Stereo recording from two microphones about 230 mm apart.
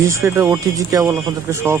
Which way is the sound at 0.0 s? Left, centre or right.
Centre.